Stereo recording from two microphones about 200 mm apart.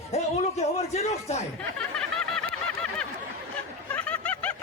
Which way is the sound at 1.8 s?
5° left (ahead or behind).